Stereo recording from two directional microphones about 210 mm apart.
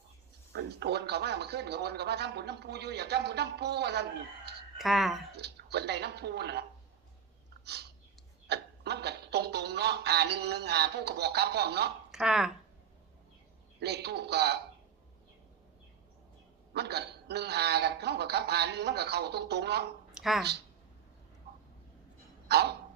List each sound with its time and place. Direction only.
0.5 s speech: 50° right (ahead or behind)
4.8 s speech: centre (ahead or behind)
5.3 s speech: 50° right (ahead or behind)
7.6 s a sound: 50° right (ahead or behind)
12.1 s speech: 5° right (ahead or behind)
13.7 s speech: 50° right (ahead or behind)
16.7 s speech: 50° right (ahead or behind)
20.1 s a sound: centre (ahead or behind)
22.4 s speech: 50° right (ahead or behind)